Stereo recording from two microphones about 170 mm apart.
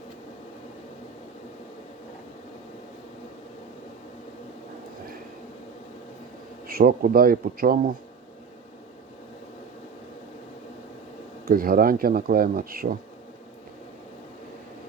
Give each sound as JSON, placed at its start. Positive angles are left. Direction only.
{"t": 6.7, "sound": "speech", "side_deg": -60}
{"t": 11.4, "sound": "speech", "side_deg": -60}